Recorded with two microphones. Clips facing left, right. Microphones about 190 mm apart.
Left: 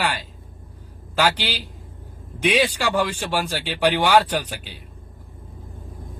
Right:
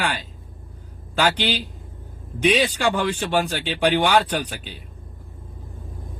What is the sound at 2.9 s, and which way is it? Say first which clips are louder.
A man's voice: right 1 dB; 10° left (ahead or behind).